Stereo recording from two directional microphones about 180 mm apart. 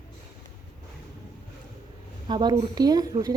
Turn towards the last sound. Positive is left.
turn(degrees=-20)  # may be behind; listen again after turning